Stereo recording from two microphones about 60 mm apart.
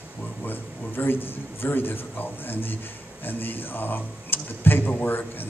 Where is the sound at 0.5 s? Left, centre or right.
Left.